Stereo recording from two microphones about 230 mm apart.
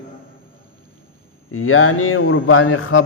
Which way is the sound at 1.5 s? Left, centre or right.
Left.